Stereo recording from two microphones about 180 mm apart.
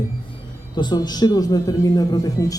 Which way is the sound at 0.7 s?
25° left (ahead or behind).